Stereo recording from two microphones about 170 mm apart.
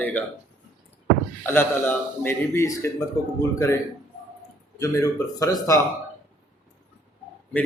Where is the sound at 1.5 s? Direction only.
15° left (ahead or behind).